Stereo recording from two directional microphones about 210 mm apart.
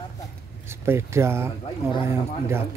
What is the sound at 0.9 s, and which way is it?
Mantra, 10° right (ahead or behind).